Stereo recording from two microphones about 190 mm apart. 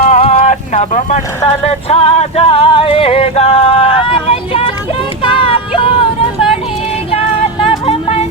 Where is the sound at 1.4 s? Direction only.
30° left (ahead or behind).